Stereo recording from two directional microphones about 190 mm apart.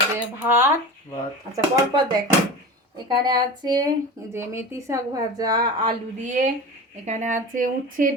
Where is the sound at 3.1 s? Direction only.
20° right (ahead or behind).